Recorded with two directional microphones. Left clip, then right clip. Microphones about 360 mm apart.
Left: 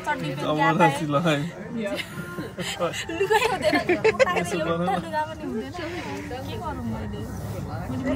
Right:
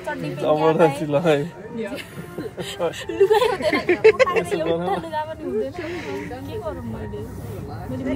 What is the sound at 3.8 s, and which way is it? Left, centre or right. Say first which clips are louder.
Speech: right 7 dB; right.